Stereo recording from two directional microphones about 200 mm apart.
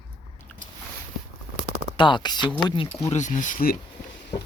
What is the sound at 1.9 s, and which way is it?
Speech, 25° left (ahead or behind).